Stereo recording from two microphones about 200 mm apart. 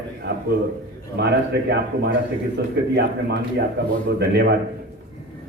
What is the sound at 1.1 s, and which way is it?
A man's voice, 55° right (ahead or behind).